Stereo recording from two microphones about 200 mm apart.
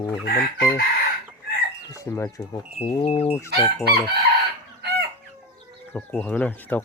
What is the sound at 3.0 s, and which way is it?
Speech, 30° left (ahead or behind).